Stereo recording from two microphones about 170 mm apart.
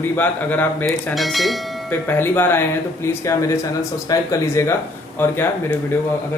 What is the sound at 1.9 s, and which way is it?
Speech, 10° left (ahead or behind).